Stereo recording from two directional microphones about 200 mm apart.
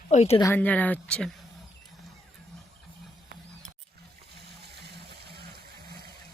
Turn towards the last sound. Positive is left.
turn(degrees=-55)  # may be behind; listen again after turning